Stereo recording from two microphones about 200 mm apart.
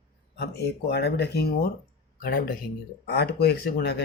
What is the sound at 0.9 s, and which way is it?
Speech, 55° left (ahead or behind).